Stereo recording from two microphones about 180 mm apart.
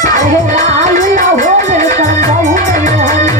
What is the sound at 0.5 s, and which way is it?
Music, 40° right (ahead or behind).